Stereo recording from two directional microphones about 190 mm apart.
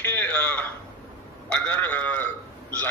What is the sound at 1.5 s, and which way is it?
Speech, 10° left (ahead or behind).